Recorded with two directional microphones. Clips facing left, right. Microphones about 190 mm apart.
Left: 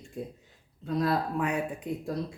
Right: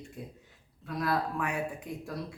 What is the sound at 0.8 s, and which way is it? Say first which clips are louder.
Speech: left 3 dB; 25° left (ahead or behind).